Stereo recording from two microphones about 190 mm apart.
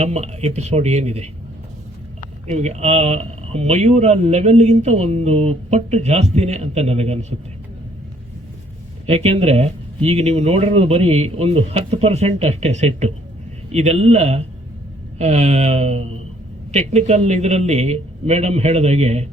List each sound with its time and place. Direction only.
0.0 s speech: 35° right (ahead or behind)
2.5 s speech: 35° right (ahead or behind)
9.0 s speech: 30° right (ahead or behind)